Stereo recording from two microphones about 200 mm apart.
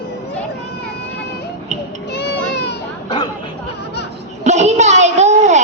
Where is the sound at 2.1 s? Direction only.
55° left (ahead or behind).